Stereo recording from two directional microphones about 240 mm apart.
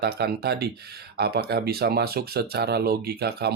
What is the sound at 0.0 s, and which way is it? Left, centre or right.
Speech, right.